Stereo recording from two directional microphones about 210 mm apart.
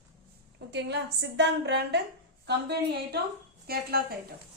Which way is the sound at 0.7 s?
55° right (ahead or behind).